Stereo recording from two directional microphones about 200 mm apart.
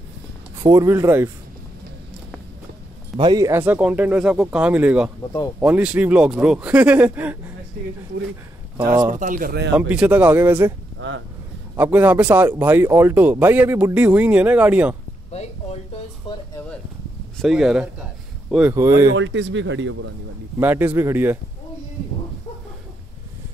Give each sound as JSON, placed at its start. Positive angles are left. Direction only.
{"t": 0.6, "sound": "speech", "side_deg": -15}
{"t": 3.2, "sound": "speech", "side_deg": -20}
{"t": 8.9, "sound": "speech", "side_deg": -20}
{"t": 9.2, "sound": "speech", "side_deg": -45}
{"t": 9.8, "sound": "speech", "side_deg": -5}
{"t": 11.0, "sound": "speech", "side_deg": -70}
{"t": 11.7, "sound": "speech", "side_deg": -10}
{"t": 17.4, "sound": "speech", "side_deg": 0}
{"t": 19.1, "sound": "speech", "side_deg": -70}
{"t": 20.5, "sound": "speech", "side_deg": -10}